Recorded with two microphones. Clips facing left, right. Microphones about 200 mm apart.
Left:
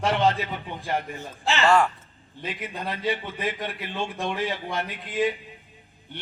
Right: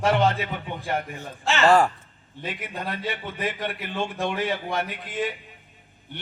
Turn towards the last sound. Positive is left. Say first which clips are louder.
# left 3 dB
turn(degrees=0)  # may be behind; listen again after turning